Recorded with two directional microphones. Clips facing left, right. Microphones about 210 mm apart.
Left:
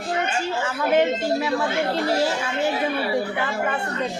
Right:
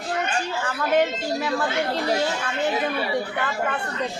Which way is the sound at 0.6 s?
Centre (ahead or behind).